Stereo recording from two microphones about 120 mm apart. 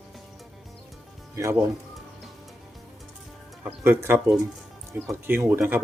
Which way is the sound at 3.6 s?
20° right (ahead or behind).